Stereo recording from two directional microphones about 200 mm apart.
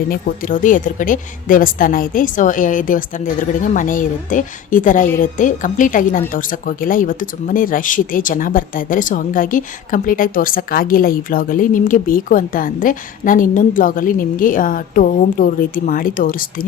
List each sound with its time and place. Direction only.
0.1 s a woman's voice: 40° left (ahead or behind)